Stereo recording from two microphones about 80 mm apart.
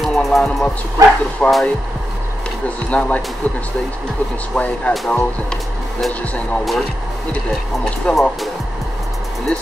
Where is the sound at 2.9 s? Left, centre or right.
Centre.